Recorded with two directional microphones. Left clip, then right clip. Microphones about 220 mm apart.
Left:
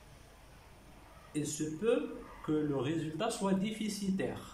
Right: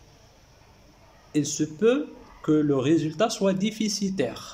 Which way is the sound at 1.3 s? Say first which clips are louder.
Right 11 dB; 50° right (ahead or behind).